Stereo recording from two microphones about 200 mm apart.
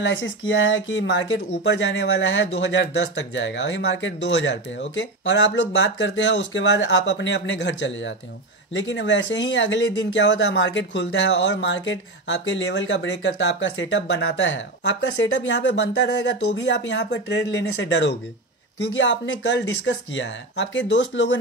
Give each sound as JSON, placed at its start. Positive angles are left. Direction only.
{"t": 0.0, "sound": "speech", "side_deg": 65}